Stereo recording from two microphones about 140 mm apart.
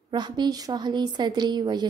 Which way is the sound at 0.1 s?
30° right (ahead or behind).